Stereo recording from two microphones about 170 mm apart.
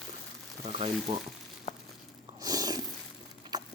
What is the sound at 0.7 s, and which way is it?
Speech, 35° right (ahead or behind).